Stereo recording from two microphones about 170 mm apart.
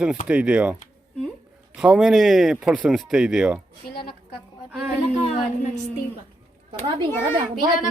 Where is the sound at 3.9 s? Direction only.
30° left (ahead or behind).